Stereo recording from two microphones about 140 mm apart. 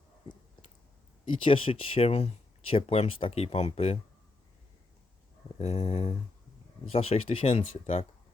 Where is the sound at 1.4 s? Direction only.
40° left (ahead or behind).